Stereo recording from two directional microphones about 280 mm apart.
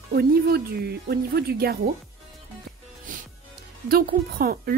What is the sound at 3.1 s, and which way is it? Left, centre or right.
Music, right.